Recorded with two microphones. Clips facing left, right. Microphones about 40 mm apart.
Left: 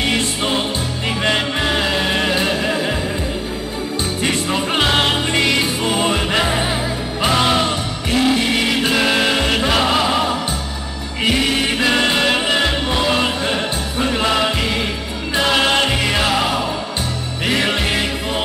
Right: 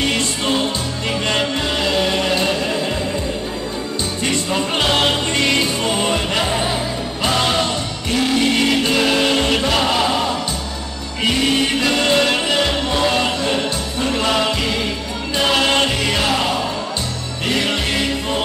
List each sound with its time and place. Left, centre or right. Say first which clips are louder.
0.1 s music: even; centre
4.2 s music: even; centre
11.9 s music: even; centre